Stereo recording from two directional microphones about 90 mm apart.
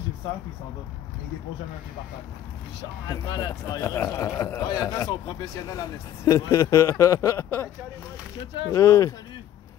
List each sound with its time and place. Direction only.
3.1 s speech: 40° left (ahead or behind)
3.8 s speech: 30° left (ahead or behind)
8.7 s speech: 35° left (ahead or behind)